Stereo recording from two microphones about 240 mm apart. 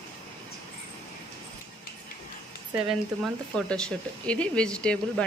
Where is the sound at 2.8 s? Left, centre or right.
Centre.